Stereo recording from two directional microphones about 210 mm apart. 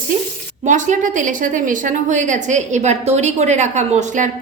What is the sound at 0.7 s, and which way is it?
A woman's voice, 35° right (ahead or behind).